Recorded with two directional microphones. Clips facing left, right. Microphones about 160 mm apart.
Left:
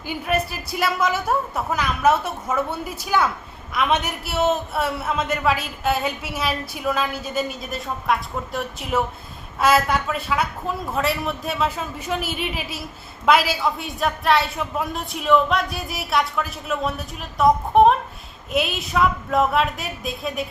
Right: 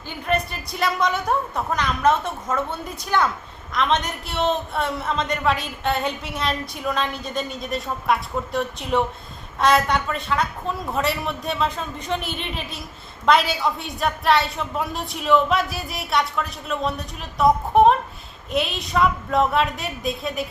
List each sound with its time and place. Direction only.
0.1 s a man's voice: 5° left (ahead or behind)